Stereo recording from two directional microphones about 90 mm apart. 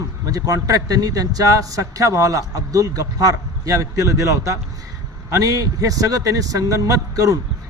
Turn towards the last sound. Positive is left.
turn(degrees=-40)  # may be behind; listen again after turning